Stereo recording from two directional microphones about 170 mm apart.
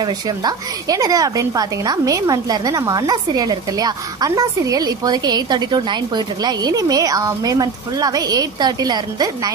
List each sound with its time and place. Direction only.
0.0 s a woman's voice: 25° right (ahead or behind)